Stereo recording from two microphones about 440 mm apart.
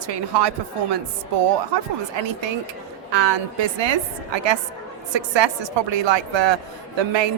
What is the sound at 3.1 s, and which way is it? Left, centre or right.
A man's voice, right.